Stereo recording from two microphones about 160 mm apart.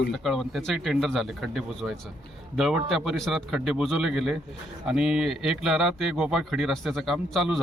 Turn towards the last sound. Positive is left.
turn(degrees=0)  # may be behind; listen again after turning